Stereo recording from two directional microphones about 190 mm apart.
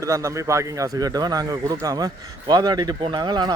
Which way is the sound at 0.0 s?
15° right (ahead or behind).